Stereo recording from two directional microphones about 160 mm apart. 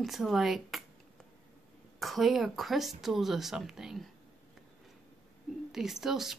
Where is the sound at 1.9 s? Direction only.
Centre (ahead or behind).